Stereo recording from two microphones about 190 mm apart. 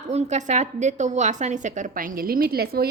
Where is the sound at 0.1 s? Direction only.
35° right (ahead or behind).